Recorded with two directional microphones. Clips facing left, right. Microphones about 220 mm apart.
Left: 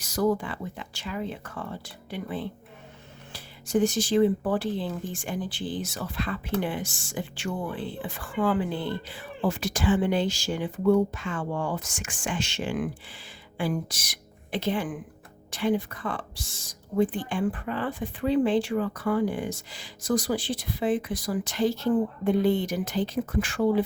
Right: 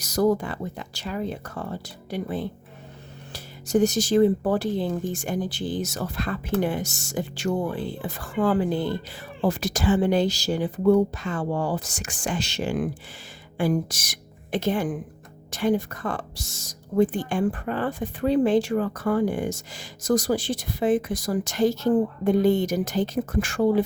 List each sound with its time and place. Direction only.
0.0 s a woman's voice: 40° right (ahead or behind)